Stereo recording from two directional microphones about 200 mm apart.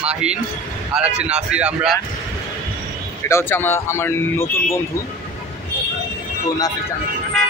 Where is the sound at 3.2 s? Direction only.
10° left (ahead or behind).